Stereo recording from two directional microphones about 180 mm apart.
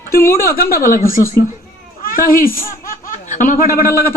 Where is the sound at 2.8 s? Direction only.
45° left (ahead or behind).